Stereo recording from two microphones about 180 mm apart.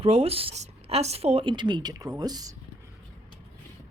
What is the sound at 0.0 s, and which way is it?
Speech, 35° right (ahead or behind).